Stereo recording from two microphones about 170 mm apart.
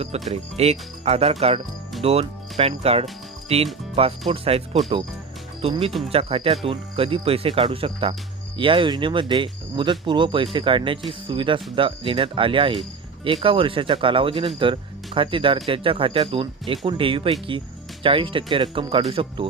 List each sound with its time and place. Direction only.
0.0 s speech: 40° right (ahead or behind)